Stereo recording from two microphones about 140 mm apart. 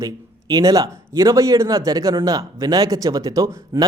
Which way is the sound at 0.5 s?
25° right (ahead or behind).